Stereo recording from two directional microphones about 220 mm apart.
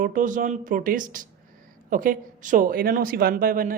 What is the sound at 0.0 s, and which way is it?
Speech, 35° right (ahead or behind).